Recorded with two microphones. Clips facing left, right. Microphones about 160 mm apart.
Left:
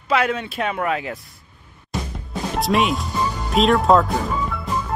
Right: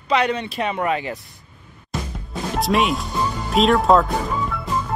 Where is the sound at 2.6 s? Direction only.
Centre (ahead or behind).